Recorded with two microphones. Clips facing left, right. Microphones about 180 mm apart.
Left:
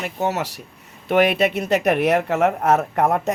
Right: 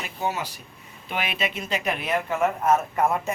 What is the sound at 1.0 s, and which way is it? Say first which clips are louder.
A man's voice: left 12 dB; 65° left (ahead or behind).